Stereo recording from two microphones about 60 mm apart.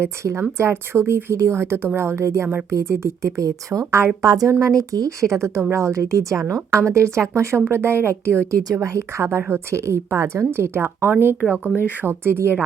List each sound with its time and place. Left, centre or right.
0.0 s a woman's voice: right
4.2 s a woman's voice: right
4.6 s speech: right
7.7 s a woman's voice: right
10.8 s speech: right